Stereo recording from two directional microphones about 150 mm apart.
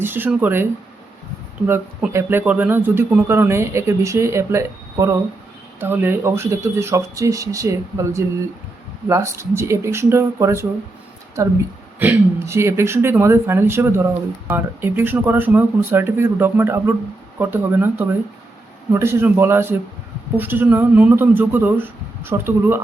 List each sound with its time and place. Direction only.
0.0 s speech: 15° right (ahead or behind)
11.9 s speech: 15° right (ahead or behind)